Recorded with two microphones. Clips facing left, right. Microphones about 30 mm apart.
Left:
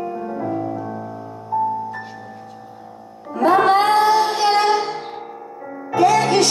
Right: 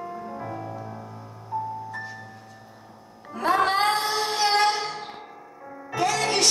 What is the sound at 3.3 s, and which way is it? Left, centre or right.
Music, centre.